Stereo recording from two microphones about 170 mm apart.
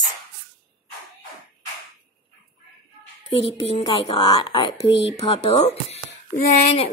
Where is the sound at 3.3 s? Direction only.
35° left (ahead or behind).